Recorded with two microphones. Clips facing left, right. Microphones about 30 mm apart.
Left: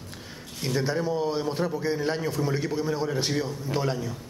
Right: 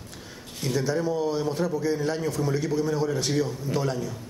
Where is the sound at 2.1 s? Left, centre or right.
Left.